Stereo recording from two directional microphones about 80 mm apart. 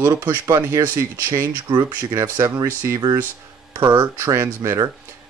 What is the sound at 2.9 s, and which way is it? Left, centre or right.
Speech, right.